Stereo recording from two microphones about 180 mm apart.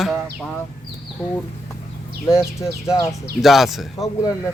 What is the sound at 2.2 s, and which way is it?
Speech, 15° left (ahead or behind).